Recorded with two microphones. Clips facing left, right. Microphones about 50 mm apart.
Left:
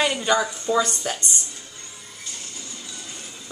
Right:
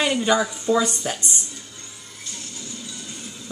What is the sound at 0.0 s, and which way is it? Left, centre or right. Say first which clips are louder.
A woman's voice: right 1 dB; centre.